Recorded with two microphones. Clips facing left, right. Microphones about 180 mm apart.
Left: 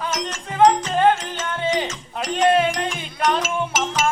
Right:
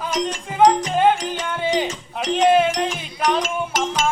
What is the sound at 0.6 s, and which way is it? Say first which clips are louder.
Music: even; 15° right (ahead or behind).